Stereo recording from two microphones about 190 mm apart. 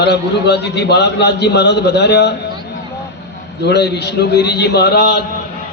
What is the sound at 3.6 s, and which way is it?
A man's voice, 60° left (ahead or behind).